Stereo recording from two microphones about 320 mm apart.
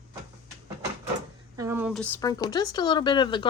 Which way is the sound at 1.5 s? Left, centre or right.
Centre.